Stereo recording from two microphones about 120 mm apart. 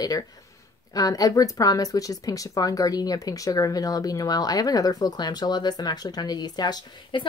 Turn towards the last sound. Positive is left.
turn(degrees=40)  # may be behind; listen again after turning